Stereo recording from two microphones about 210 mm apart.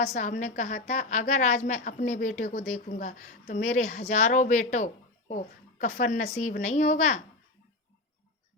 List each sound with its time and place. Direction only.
0.1 s a woman's voice: 35° left (ahead or behind)